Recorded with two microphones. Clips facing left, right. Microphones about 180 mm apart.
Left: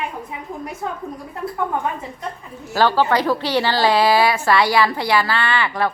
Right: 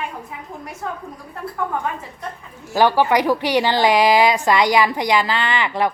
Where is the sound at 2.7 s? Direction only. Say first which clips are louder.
Right 1 dB; 15° right (ahead or behind).